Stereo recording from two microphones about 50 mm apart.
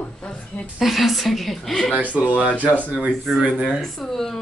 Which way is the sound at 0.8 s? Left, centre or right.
Centre.